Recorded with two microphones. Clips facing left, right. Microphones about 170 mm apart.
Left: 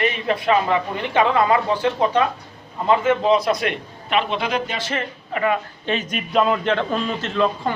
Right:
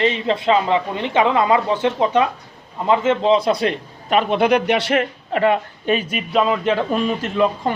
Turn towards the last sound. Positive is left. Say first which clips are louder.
# right 2 dB
turn(degrees=-15)  # may be behind; listen again after turning